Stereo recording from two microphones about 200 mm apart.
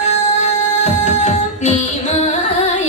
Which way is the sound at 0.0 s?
35° left (ahead or behind).